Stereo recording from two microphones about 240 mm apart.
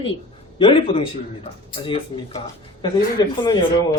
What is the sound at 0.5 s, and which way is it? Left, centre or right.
A man's voice, left.